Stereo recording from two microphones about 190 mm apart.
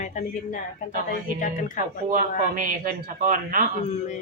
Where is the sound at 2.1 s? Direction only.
45° right (ahead or behind).